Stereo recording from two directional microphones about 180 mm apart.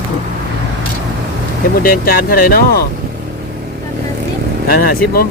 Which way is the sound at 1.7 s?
55° left (ahead or behind).